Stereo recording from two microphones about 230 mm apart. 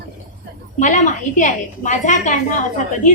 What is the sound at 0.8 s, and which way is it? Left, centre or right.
A woman's voice, left.